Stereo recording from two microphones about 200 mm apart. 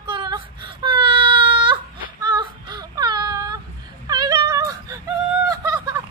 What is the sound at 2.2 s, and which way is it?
Child singing, 20° right (ahead or behind).